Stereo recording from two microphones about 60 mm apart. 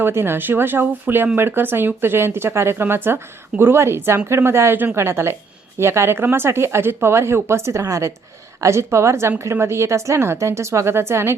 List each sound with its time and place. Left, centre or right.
0.0 s speech: right